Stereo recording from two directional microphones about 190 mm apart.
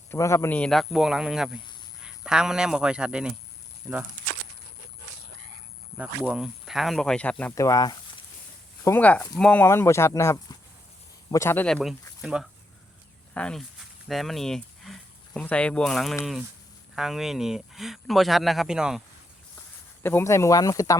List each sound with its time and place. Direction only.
0.1 s a man's voice: 15° left (ahead or behind); by 3.3 s 5° right (ahead or behind)
4.2 s a sound: 45° right (ahead or behind)
6.0 s a man's voice: 5° right (ahead or behind)
20.0 s speech: 10° left (ahead or behind)